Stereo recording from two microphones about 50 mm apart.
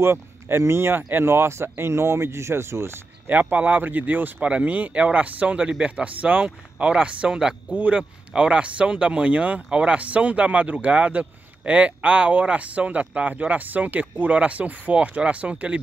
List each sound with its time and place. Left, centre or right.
0.0 s speech: right
3.3 s speech: right